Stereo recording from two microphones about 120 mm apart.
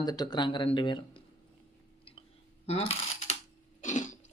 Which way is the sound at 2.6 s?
60° left (ahead or behind).